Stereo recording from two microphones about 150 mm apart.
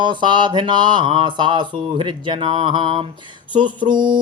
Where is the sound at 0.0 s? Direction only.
30° right (ahead or behind).